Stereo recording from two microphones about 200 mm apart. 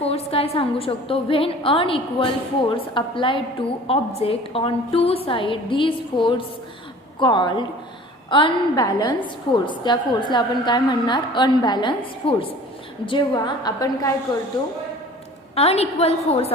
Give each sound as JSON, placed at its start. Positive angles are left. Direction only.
{"t": 0.0, "sound": "a woman's voice", "side_deg": 30}
{"t": 15.5, "sound": "a woman's voice", "side_deg": 30}